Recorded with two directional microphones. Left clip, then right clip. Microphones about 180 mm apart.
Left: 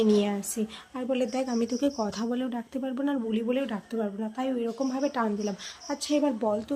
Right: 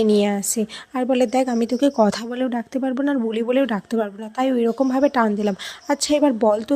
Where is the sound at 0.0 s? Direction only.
35° right (ahead or behind).